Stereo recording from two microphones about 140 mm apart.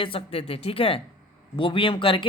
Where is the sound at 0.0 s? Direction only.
40° left (ahead or behind).